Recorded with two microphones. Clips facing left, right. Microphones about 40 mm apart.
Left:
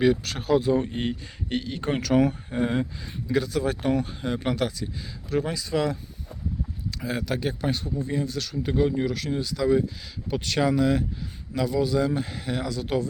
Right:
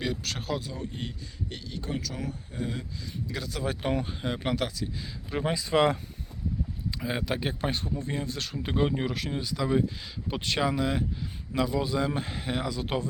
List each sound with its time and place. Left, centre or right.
0.0 s speech: centre
0.7 s speech: left
3.2 s speech: centre
3.5 s speech: centre
5.3 s speech: right
7.2 s speech: centre